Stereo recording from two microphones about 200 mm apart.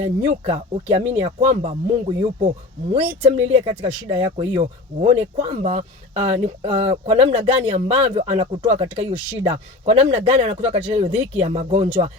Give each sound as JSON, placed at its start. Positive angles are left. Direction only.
{"t": 0.0, "sound": "speech", "side_deg": -30}